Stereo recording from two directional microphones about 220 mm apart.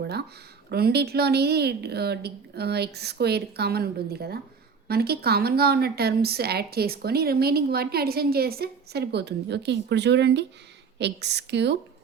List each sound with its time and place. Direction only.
0.7 s a woman's voice: 45° right (ahead or behind)